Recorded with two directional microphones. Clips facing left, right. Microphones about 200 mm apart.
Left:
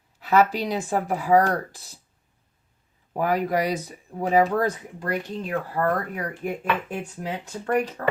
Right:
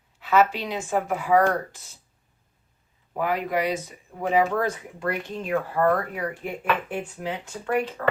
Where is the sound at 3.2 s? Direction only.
40° left (ahead or behind).